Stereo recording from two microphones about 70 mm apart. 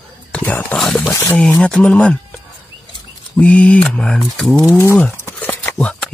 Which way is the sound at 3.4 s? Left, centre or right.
Centre.